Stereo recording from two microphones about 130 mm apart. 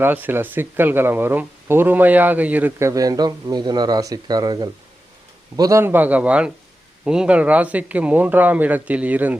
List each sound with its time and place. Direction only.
0.0 s speech: 15° right (ahead or behind)